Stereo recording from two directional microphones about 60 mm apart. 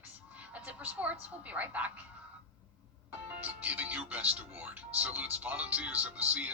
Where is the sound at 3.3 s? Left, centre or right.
Right.